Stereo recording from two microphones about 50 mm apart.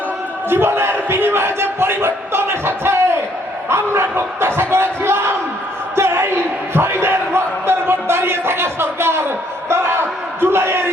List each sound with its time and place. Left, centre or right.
0.5 s crowd: right
3.7 s speech: right
6.0 s a sound: right